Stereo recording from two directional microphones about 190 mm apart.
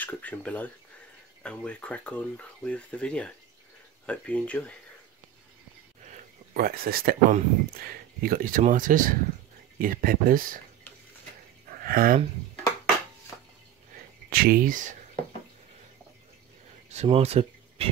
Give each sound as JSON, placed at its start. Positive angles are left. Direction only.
{"t": 0.0, "sound": "speech", "side_deg": 10}
{"t": 6.1, "sound": "speech", "side_deg": -50}
{"t": 11.7, "sound": "speech", "side_deg": -50}
{"t": 14.3, "sound": "speech", "side_deg": -50}
{"t": 16.9, "sound": "speech", "side_deg": -35}